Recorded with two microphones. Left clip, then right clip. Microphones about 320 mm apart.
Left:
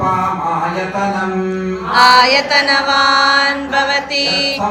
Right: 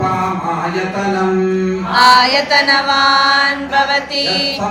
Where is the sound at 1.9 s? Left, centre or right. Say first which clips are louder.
Left 1 dB; centre.